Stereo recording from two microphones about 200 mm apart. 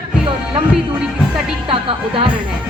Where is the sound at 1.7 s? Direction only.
25° right (ahead or behind).